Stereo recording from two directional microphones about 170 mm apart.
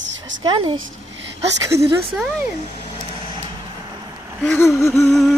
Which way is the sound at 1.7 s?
75° right (ahead or behind).